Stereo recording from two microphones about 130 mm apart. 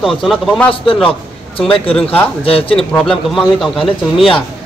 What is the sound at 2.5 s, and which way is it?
Speech, 45° left (ahead or behind).